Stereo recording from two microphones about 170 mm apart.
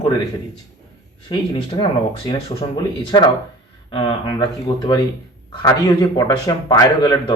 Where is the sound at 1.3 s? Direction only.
30° left (ahead or behind).